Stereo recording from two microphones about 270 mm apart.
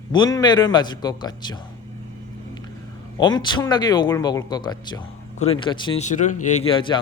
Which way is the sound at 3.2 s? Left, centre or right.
Centre.